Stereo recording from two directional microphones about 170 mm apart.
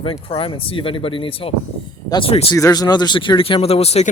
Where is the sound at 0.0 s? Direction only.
35° left (ahead or behind).